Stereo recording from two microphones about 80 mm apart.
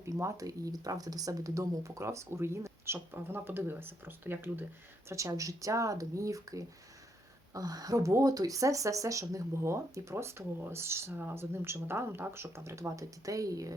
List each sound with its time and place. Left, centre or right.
0.0 s speech: right
5.0 s speech: right